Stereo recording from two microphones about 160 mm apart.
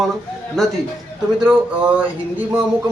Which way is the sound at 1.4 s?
5° right (ahead or behind).